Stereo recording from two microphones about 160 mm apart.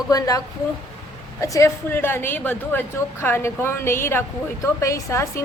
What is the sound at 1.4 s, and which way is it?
A woman's voice, 20° left (ahead or behind).